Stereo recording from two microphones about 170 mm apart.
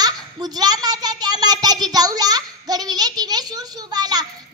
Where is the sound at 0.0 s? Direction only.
25° right (ahead or behind).